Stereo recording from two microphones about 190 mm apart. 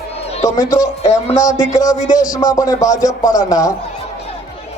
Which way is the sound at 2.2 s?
20° left (ahead or behind).